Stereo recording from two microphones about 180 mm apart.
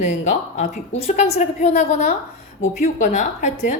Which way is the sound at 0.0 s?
40° left (ahead or behind).